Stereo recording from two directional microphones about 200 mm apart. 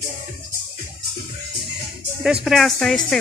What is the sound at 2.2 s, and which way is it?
Speech, centre (ahead or behind).